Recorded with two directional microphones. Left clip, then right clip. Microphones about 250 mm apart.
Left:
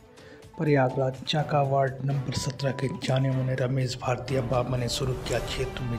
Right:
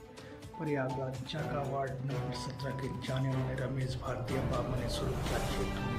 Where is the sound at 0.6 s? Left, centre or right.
Left.